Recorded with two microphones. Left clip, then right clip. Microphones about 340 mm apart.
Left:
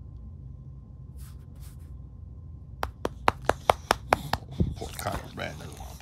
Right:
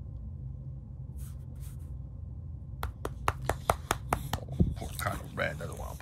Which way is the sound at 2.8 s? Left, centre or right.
Centre.